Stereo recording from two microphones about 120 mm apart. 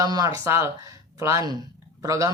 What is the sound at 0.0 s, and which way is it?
Speech, 30° right (ahead or behind).